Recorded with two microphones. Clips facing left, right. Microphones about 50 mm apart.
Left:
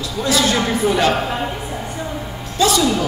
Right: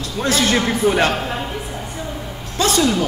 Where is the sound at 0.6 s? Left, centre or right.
Right.